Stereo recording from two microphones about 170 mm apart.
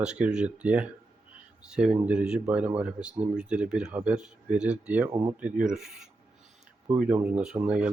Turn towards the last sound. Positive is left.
turn(degrees=-5)  # may be behind; listen again after turning